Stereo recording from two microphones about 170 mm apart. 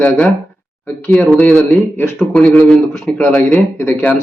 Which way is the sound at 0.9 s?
10° left (ahead or behind).